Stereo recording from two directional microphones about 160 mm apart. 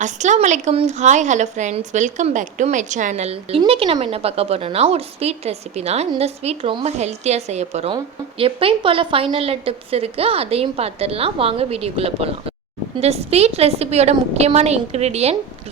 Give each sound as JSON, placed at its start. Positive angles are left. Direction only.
{"t": 0.0, "sound": "a woman's voice", "side_deg": -50}